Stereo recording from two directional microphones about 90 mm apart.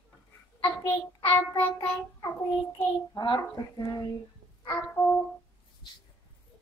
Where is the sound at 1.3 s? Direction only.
25° left (ahead or behind).